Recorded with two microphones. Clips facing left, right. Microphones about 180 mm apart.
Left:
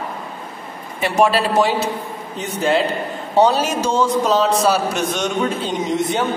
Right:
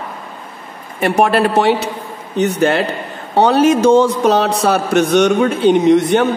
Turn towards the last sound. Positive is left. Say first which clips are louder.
# right 9 dB
turn(degrees=-65)  # may be behind; listen again after turning